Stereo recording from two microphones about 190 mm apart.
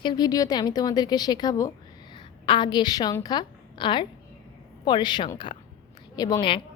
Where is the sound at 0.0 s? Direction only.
20° left (ahead or behind).